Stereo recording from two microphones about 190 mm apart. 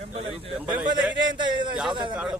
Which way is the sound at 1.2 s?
25° right (ahead or behind).